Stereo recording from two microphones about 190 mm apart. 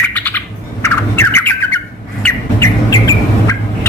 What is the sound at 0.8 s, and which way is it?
Squawk, 10° left (ahead or behind).